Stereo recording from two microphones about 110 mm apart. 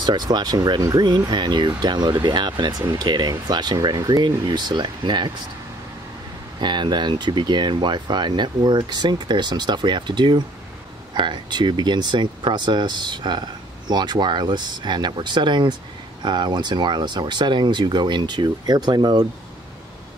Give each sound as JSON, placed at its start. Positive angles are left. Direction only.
{"t": 0.0, "sound": "speech", "side_deg": -40}
{"t": 6.6, "sound": "speech", "side_deg": -45}